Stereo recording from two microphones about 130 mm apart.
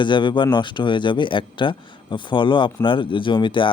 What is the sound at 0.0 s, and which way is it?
A man's voice, 35° left (ahead or behind).